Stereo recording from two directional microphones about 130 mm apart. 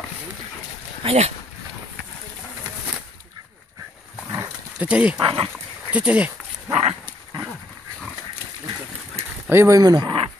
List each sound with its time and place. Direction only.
1.0 s speech: 55° right (ahead or behind)
4.4 s dog: 10° right (ahead or behind)
5.2 s speech: 45° right (ahead or behind)
5.9 s speech: 10° right (ahead or behind)
6.7 s dog: 55° right (ahead or behind)
9.5 s speech: 20° right (ahead or behind); by 10.3 s 40° right (ahead or behind)